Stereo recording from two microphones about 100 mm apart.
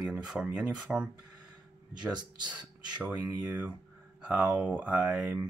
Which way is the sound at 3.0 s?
15° right (ahead or behind).